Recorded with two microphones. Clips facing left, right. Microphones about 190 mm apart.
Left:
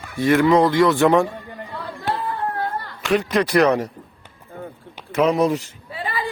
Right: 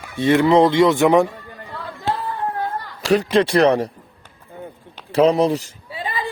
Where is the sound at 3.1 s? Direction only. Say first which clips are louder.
Right 3 dB; 30° right (ahead or behind).